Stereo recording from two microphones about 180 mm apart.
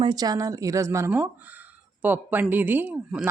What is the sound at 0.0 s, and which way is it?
Speech, 25° right (ahead or behind).